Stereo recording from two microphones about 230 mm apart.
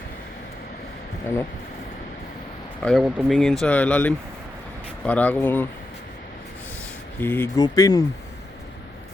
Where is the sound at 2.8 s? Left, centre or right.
Centre.